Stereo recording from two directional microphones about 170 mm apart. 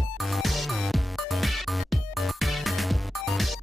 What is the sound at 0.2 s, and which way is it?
Music, centre (ahead or behind).